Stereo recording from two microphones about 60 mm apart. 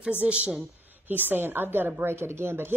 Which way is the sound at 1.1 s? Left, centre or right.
Right.